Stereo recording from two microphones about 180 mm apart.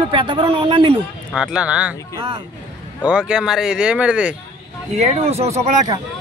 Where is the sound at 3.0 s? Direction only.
5° right (ahead or behind).